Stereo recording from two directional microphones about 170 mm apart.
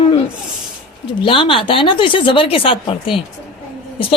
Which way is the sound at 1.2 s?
30° left (ahead or behind).